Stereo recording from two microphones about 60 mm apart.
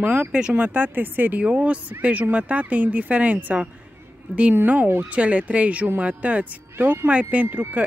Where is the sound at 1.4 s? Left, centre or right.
Centre.